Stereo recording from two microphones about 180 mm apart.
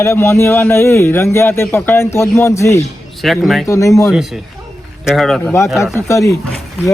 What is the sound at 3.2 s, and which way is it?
Speech, centre (ahead or behind).